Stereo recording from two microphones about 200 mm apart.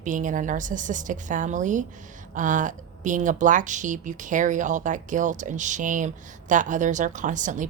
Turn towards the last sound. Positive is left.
turn(degrees=-40)  # may be behind; listen again after turning